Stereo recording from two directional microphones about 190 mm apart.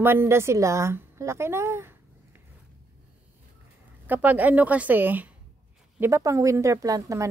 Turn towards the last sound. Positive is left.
turn(degrees=-15)  # may be behind; listen again after turning